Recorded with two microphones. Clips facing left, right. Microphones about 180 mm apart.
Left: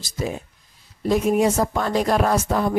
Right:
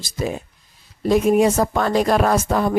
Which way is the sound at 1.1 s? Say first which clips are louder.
Right 3 dB; 80° right.